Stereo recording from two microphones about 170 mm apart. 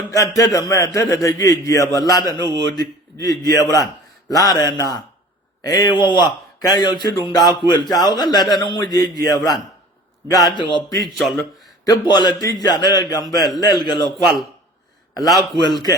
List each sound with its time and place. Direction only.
0.1 s a man's voice: 20° left (ahead or behind)
11.0 s speech: centre (ahead or behind)
11.9 s a man's voice: 25° left (ahead or behind)
15.1 s a man's voice: 20° left (ahead or behind)